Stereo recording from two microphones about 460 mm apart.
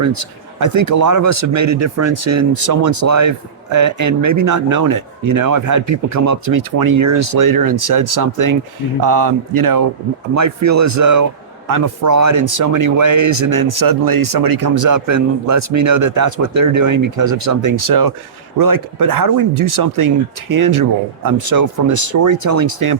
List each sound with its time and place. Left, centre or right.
0.6 s speech: right